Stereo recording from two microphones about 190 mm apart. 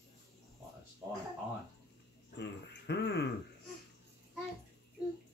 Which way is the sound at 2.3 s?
65° left (ahead or behind).